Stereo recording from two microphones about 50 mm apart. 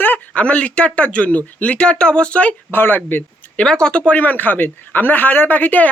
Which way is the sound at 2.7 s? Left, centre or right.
Left.